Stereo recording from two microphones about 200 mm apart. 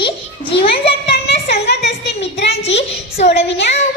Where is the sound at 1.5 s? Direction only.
55° left (ahead or behind).